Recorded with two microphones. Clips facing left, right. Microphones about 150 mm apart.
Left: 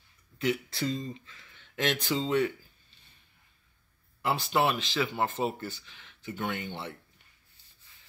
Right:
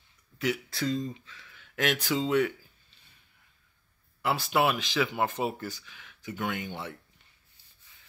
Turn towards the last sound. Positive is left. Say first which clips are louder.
# right 1 dB
turn(degrees=-5)  # may be behind; listen again after turning